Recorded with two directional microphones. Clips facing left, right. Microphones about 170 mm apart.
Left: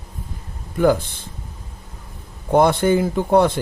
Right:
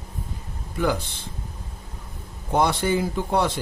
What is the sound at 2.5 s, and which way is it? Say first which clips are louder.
A man's voice: left 6 dB; 55° left (ahead or behind).